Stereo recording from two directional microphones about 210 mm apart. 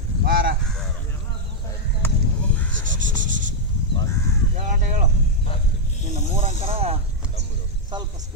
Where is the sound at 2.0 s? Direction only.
10° left (ahead or behind).